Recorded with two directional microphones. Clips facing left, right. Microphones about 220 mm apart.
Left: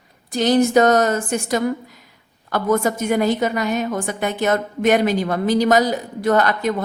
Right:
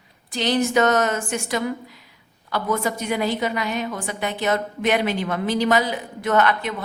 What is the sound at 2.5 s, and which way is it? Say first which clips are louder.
A woman's voice: left 5 dB; 45° left (ahead or behind).